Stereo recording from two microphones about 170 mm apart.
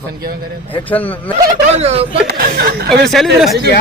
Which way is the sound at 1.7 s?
35° right (ahead or behind).